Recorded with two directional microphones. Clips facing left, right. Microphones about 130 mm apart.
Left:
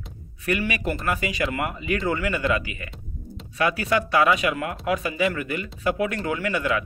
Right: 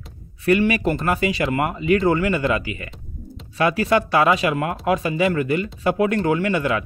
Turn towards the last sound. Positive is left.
turn(degrees=-30)  # may be behind; listen again after turning